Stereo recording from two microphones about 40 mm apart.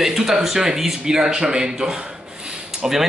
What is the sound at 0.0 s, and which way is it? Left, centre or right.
A man's voice, centre.